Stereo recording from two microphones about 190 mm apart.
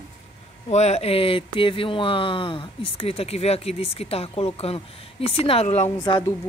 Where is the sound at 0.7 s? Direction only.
35° left (ahead or behind).